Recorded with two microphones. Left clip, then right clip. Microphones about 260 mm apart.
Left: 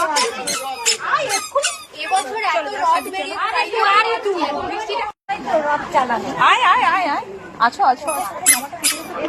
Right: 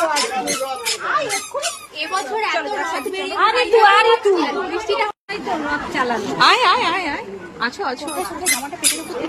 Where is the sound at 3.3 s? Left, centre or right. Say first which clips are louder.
Right 6 dB; right.